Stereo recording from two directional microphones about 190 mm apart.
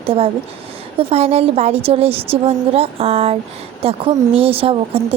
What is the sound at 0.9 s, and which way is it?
Speech, 30° right (ahead or behind).